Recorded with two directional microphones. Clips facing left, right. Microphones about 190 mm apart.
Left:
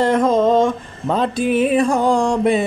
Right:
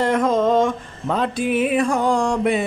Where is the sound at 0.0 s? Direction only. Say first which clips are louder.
Left 3 dB; 30° left (ahead or behind).